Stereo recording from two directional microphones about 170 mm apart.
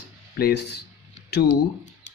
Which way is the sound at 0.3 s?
70° left (ahead or behind).